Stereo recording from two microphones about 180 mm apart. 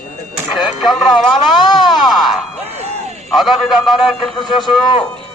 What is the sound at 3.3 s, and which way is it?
A man's voice, centre (ahead or behind).